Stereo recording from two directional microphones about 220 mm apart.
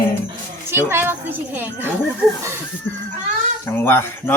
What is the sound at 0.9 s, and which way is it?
Speech, 10° right (ahead or behind).